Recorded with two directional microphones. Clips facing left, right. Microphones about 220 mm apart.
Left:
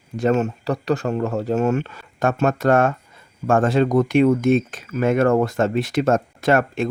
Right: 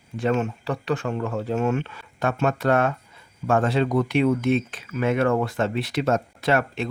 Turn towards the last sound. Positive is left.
turn(degrees=50)  # may be behind; listen again after turning